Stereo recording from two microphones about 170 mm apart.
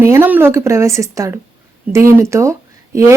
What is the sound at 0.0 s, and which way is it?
Speech, 15° right (ahead or behind).